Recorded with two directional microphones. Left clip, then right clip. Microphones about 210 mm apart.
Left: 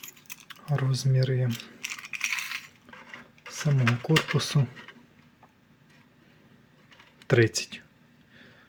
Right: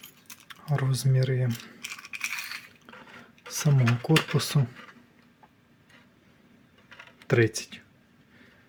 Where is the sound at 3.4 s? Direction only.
15° right (ahead or behind).